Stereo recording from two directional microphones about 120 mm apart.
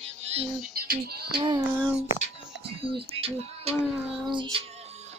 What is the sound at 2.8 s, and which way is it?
Music, 50° right (ahead or behind).